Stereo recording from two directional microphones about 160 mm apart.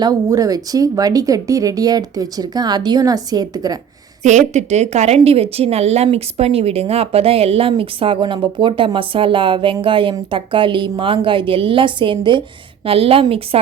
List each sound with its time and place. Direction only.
0.0 s speech: 20° right (ahead or behind)
4.2 s speech: 50° right (ahead or behind)